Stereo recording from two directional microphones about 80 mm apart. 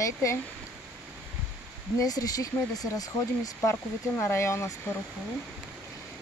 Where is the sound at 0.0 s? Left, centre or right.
Left.